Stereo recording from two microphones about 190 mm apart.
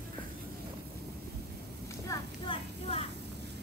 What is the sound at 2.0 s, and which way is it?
Clip-clop, 25° left (ahead or behind).